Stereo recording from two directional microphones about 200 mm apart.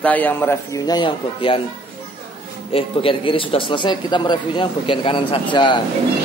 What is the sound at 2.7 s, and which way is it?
Speech, 25° left (ahead or behind).